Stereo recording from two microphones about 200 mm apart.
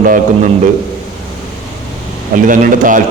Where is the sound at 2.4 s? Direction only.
40° right (ahead or behind).